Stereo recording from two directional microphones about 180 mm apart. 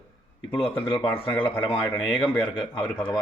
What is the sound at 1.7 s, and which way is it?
Speech, 15° left (ahead or behind).